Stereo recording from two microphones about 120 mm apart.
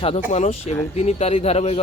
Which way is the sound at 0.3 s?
75° left (ahead or behind).